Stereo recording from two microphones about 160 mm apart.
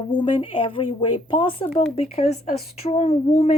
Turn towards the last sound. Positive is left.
turn(degrees=40)  # may be behind; listen again after turning